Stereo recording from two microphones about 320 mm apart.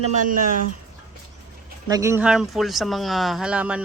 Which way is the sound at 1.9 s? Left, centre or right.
Centre.